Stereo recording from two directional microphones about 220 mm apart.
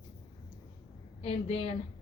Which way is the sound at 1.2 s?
25° left (ahead or behind).